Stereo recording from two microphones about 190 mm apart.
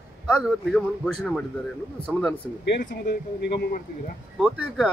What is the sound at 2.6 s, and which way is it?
Speech, 65° left (ahead or behind).